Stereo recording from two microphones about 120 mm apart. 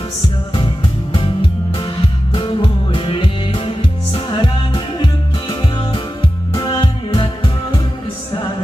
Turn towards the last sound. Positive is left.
turn(degrees=45)  # may be behind; listen again after turning